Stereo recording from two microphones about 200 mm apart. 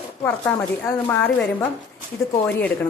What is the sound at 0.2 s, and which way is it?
Speech, 10° left (ahead or behind).